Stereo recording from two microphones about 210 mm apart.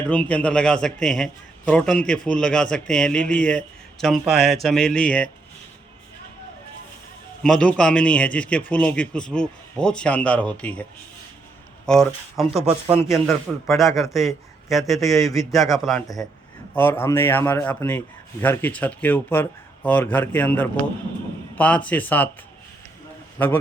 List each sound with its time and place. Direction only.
0.0 s a man's voice: 5° left (ahead or behind)
7.4 s a man's voice: 5° left (ahead or behind)
11.9 s a man's voice: centre (ahead or behind)
12.6 s a man's voice: 30° right (ahead or behind)
13.2 s a man's voice: centre (ahead or behind)
16.7 s a man's voice: 10° left (ahead or behind)